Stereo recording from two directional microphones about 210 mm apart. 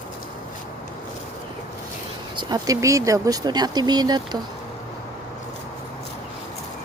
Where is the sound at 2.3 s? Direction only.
20° right (ahead or behind).